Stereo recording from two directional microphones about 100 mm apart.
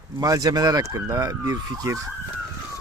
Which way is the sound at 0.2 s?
40° right (ahead or behind).